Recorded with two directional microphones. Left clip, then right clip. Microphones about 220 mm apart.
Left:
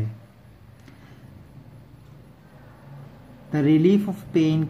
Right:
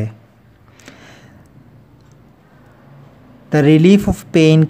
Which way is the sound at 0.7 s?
50° right (ahead or behind).